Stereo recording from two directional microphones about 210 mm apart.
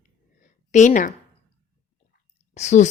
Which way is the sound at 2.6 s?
35° left (ahead or behind).